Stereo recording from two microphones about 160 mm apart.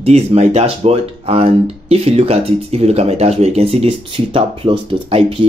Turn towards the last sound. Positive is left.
turn(degrees=-35)  # may be behind; listen again after turning